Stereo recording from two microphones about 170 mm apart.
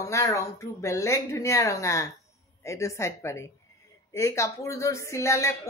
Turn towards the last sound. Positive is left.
turn(degrees=15)  # may be behind; listen again after turning